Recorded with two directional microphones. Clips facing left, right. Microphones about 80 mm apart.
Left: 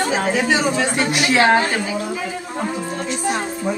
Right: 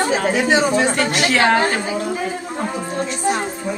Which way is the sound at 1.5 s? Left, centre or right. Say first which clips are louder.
Right 1 dB; right.